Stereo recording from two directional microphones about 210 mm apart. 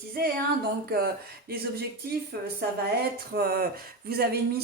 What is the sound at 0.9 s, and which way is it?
Speech, 45° right (ahead or behind).